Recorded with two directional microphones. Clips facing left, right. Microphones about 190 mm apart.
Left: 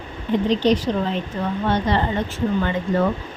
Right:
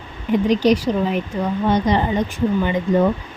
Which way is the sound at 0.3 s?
10° right (ahead or behind).